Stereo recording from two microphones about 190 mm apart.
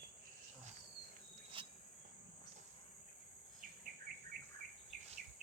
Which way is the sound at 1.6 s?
25° right (ahead or behind).